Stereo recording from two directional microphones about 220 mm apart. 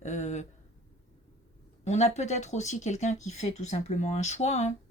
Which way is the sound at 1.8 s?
30° left (ahead or behind).